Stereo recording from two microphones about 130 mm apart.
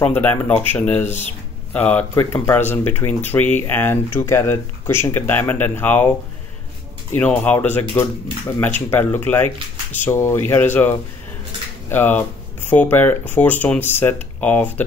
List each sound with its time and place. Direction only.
0.0 s speech: 15° left (ahead or behind)
1.0 s speech: 60° left (ahead or behind)
1.7 s speech: 10° left (ahead or behind)
7.1 s speech: 15° left (ahead or behind)